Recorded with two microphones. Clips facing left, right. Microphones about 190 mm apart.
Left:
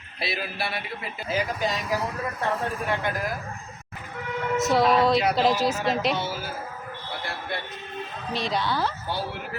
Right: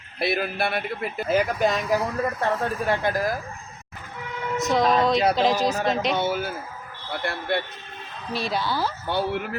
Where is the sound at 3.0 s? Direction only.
35° right (ahead or behind).